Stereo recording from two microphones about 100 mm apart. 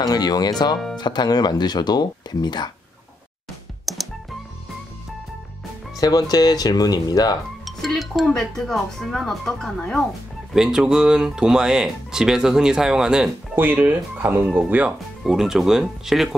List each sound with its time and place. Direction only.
0.0 s speech: 40° left (ahead or behind)
3.8 s music: centre (ahead or behind)
5.9 s speech: 40° left (ahead or behind)
7.6 s speech: centre (ahead or behind)
13.6 s speech: 20° right (ahead or behind)
15.2 s speech: 5° right (ahead or behind)